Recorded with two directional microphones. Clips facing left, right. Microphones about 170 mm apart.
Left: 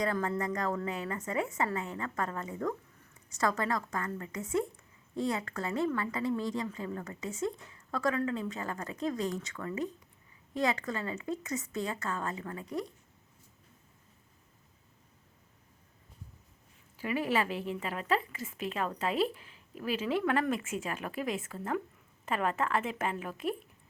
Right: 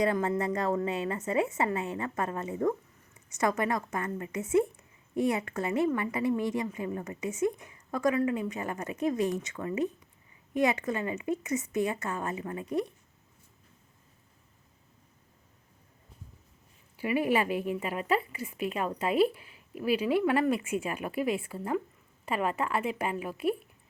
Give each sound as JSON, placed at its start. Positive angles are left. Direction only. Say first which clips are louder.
{"t": 0.0, "sound": "a woman's voice", "louder": "right 4 dB", "side_deg": -20}
{"t": 17.0, "sound": "speech", "louder": "right 4 dB", "side_deg": -15}